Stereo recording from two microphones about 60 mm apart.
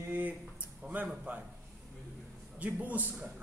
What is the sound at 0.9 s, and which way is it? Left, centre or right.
Speech, right.